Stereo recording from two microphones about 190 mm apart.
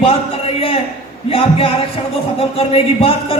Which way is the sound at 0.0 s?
30° left (ahead or behind).